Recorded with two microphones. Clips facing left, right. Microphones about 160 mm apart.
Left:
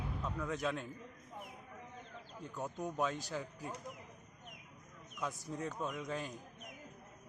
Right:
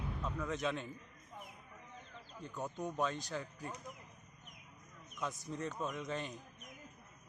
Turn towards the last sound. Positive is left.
turn(degrees=5)  # may be behind; listen again after turning